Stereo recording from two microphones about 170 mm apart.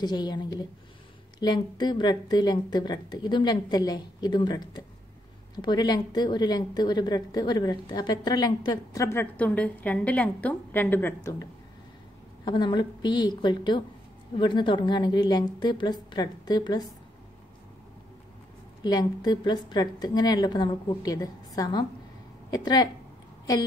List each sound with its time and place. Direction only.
0.0 s speech: 25° left (ahead or behind)
12.4 s speech: 25° left (ahead or behind)
18.8 s speech: 25° left (ahead or behind)